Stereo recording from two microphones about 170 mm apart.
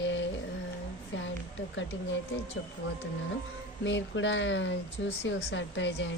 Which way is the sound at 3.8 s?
90° left.